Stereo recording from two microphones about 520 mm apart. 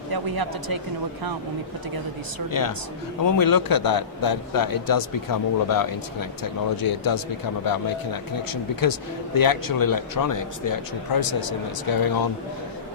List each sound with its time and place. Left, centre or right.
0.1 s speech: right
2.5 s a man's voice: left
8.4 s a man's voice: left